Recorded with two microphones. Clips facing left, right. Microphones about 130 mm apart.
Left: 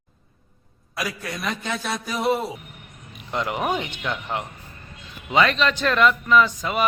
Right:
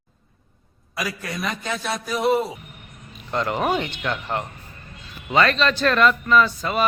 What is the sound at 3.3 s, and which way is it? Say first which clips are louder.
A man's voice: right 2 dB; 10° left (ahead or behind).